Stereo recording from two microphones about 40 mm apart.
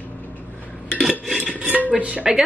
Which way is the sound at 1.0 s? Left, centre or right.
Centre.